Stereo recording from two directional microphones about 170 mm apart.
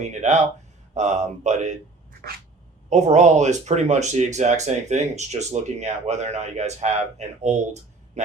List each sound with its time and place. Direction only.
0.0 s speech: 45° right (ahead or behind)
2.9 s speech: 40° right (ahead or behind)